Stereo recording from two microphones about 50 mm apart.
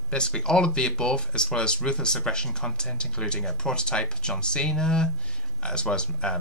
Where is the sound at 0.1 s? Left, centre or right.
Centre.